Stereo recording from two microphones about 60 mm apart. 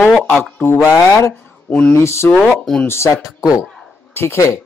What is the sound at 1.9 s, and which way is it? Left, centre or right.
Speech, left.